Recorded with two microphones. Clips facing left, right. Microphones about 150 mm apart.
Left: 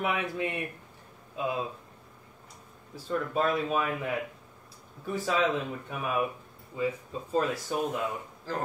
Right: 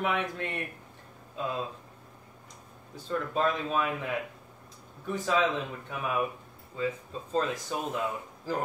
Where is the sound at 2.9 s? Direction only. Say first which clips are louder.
Left 1 dB; 5° left (ahead or behind).